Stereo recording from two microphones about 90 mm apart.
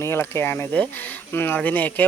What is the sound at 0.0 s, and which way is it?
Speech, 25° left (ahead or behind).